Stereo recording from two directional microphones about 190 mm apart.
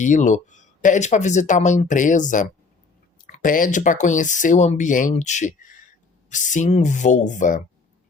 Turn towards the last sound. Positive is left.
turn(degrees=40)  # may be behind; listen again after turning